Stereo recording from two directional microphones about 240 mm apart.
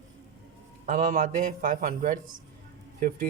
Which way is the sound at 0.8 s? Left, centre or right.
Right.